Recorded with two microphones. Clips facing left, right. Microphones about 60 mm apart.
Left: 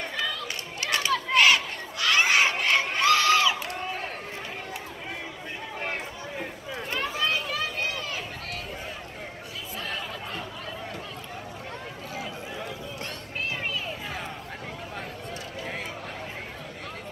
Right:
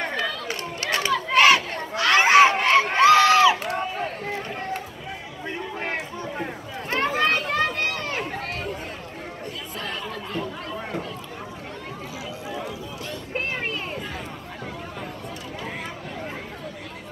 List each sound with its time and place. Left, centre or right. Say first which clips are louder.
0.8 s crowd: right 2 dB; right
6.9 s run: right 7 dB; right